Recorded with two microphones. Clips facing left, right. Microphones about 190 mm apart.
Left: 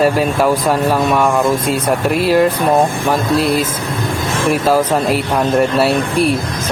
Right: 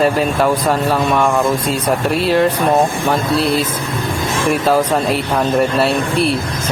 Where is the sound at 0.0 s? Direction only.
10° left (ahead or behind).